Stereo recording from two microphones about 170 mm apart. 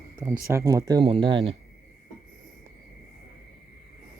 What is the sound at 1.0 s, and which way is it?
Speech, 30° right (ahead or behind).